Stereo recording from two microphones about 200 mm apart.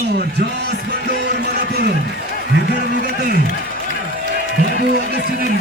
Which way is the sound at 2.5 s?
60° right (ahead or behind).